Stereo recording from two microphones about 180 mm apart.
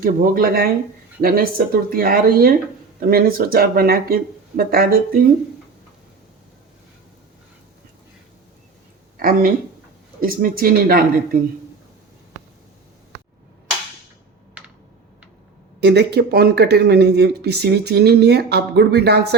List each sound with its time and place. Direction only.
0.0 s speech: 50° right (ahead or behind)
9.1 s speech: 55° right (ahead or behind)
15.8 s speech: 70° right (ahead or behind)